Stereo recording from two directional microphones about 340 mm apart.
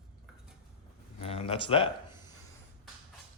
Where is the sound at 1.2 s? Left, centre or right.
Centre.